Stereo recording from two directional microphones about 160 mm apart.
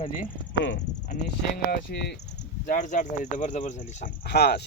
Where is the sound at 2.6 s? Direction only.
50° left (ahead or behind).